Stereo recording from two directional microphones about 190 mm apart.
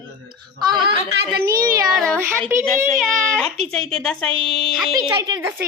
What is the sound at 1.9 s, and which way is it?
Speech, 5° left (ahead or behind).